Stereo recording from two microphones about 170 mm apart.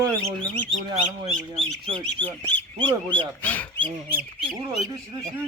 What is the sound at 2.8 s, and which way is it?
Speech, 30° right (ahead or behind).